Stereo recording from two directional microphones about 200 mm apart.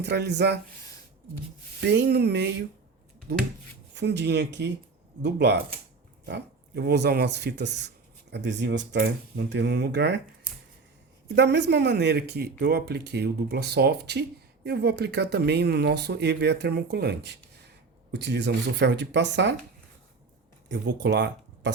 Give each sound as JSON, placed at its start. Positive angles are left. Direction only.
{"t": 0.0, "sound": "speech", "side_deg": -55}
{"t": 1.8, "sound": "speech", "side_deg": -55}
{"t": 11.3, "sound": "speech", "side_deg": -60}
{"t": 20.7, "sound": "speech", "side_deg": -60}